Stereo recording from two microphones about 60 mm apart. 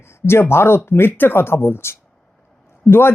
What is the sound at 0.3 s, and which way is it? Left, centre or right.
Speech, left.